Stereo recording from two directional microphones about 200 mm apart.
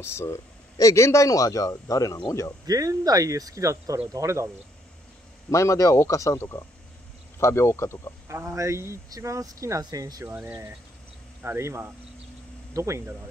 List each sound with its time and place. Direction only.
0.0 s a man's voice: 15° left (ahead or behind)
2.6 s speech: 20° right (ahead or behind)
5.5 s a man's voice: 15° left (ahead or behind)
8.3 s speech: 15° right (ahead or behind)